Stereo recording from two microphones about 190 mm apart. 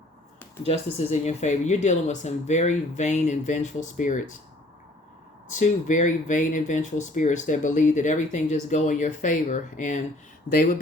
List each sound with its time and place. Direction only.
0.6 s speech: 35° left (ahead or behind)
5.5 s speech: 40° left (ahead or behind)